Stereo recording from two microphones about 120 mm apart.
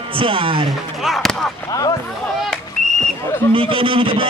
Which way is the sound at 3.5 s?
45° right (ahead or behind).